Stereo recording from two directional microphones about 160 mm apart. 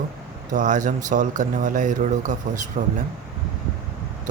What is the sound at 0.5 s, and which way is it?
Speech, 50° right (ahead or behind).